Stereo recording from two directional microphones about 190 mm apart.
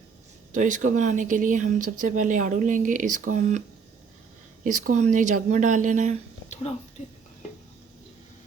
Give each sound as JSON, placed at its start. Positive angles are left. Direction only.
{"t": 0.5, "sound": "speech", "side_deg": -45}
{"t": 4.6, "sound": "speech", "side_deg": -45}
{"t": 6.5, "sound": "speech", "side_deg": 35}